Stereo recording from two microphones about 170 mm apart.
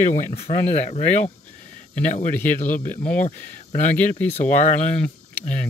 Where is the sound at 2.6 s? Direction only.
50° left (ahead or behind).